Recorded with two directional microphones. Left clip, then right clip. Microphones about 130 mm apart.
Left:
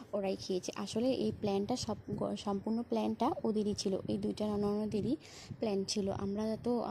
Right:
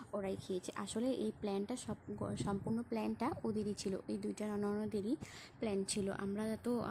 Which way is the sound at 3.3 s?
15° right (ahead or behind).